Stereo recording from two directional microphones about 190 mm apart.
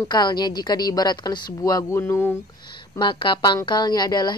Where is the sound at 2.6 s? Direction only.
25° left (ahead or behind).